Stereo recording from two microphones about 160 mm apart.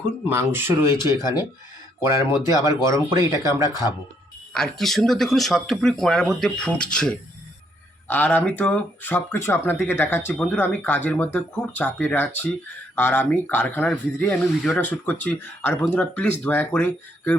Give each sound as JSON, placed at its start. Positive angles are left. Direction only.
{"t": 0.3, "sound": "speech", "side_deg": -15}
{"t": 1.0, "sound": "speech", "side_deg": 25}
{"t": 2.0, "sound": "speech", "side_deg": -15}
{"t": 2.5, "sound": "speech", "side_deg": 25}
{"t": 3.1, "sound": "speech", "side_deg": -15}
{"t": 3.7, "sound": "speech", "side_deg": 25}
{"t": 4.5, "sound": "speech", "side_deg": 5}